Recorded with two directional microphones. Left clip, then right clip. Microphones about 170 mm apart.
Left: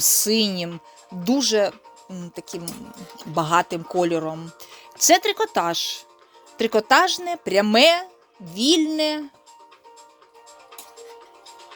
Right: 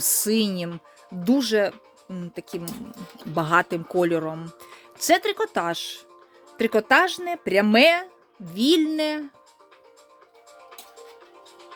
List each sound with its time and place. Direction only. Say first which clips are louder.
0.0 s speech: left 4 dB; 15° right (ahead or behind)
4.7 s speech: left 4 dB; 10° right (ahead or behind)